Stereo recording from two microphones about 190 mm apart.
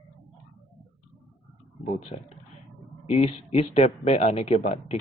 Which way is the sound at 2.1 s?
30° left (ahead or behind).